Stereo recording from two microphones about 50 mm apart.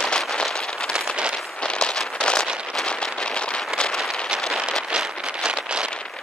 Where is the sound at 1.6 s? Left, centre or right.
Centre.